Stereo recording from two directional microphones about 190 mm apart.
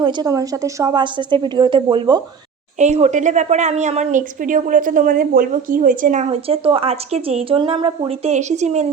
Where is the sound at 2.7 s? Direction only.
40° right (ahead or behind).